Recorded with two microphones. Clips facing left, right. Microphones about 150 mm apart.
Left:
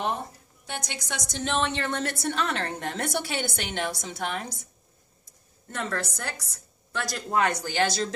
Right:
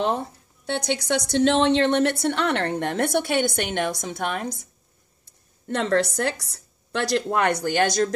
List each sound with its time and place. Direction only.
0.7 s a woman's voice: 70° right (ahead or behind); by 4.5 s 55° right (ahead or behind)
5.7 s a woman's voice: 75° right (ahead or behind)
7.6 s speech: 50° right (ahead or behind)